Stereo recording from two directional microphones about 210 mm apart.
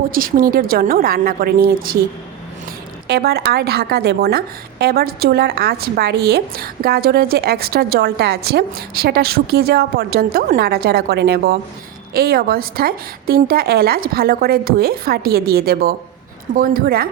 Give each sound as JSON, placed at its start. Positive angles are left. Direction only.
{"t": 0.1, "sound": "a woman's voice", "side_deg": -40}
{"t": 3.1, "sound": "a woman's voice", "side_deg": -50}